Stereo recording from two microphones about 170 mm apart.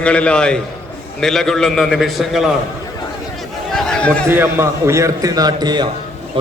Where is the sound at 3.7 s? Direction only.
5° left (ahead or behind).